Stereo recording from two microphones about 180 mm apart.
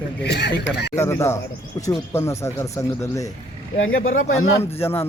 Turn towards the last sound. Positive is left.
turn(degrees=15)  # may be behind; listen again after turning